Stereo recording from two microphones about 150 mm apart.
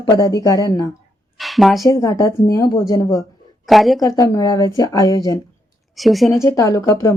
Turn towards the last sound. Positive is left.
turn(degrees=20)  # may be behind; listen again after turning